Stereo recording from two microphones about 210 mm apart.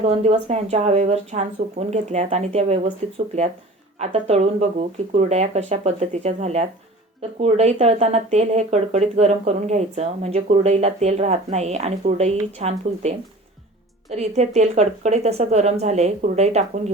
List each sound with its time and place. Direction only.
0.0 s speech: 30° right (ahead or behind)